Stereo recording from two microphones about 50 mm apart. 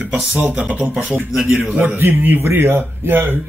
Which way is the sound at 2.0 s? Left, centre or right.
Right.